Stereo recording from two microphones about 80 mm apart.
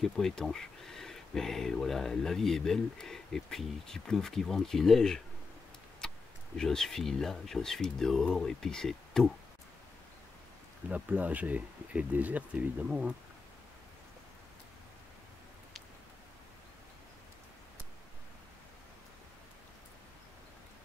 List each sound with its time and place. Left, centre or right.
0.0 s speech: centre
10.9 s speech: right